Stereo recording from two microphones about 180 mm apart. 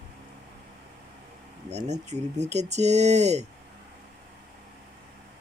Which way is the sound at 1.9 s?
40° right (ahead or behind).